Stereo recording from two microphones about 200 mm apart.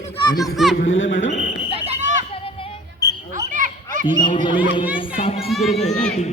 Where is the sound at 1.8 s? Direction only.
35° right (ahead or behind).